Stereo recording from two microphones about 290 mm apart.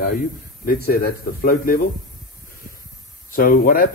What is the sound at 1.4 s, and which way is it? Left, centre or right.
Speech, left.